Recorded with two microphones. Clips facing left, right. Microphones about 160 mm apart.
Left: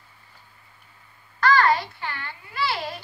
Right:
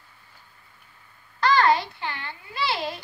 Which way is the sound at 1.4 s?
25° right (ahead or behind).